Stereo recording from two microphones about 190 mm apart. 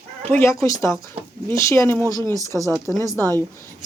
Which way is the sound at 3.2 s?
10° left (ahead or behind).